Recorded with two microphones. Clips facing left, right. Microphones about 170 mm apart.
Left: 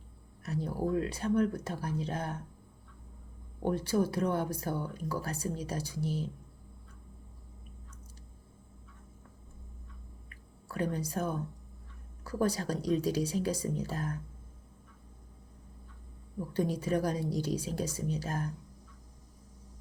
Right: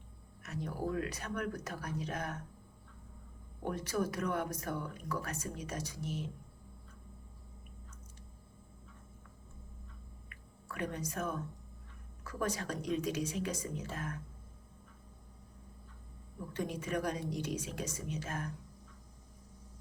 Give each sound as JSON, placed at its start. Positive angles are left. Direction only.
{"t": 0.4, "sound": "speech", "side_deg": 30}
{"t": 3.6, "sound": "speech", "side_deg": 30}
{"t": 10.2, "sound": "a sound", "side_deg": 30}
{"t": 12.2, "sound": "speech", "side_deg": 35}
{"t": 16.5, "sound": "speech", "side_deg": 35}